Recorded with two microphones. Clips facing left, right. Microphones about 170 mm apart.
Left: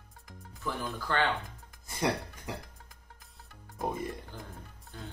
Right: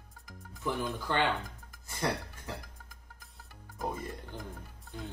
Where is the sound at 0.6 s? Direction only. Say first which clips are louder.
Right 2 dB; 15° right (ahead or behind).